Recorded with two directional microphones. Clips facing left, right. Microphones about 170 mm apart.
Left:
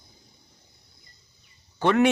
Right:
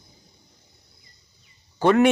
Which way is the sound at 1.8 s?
40° right (ahead or behind).